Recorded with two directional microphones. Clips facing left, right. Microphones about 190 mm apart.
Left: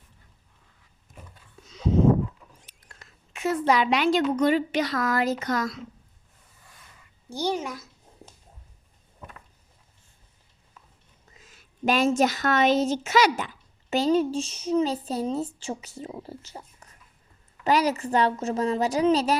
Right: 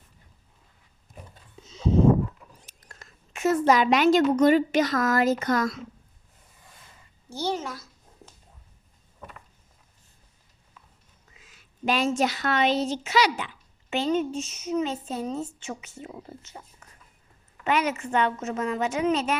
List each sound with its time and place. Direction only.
1.6 s a sound: 25° right (ahead or behind)
2.6 s a woman's voice: 45° right (ahead or behind)
7.3 s speech: 15° left (ahead or behind)
11.3 s a woman's voice: 45° left (ahead or behind)